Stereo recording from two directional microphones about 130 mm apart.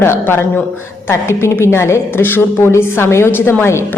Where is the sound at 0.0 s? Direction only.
20° left (ahead or behind).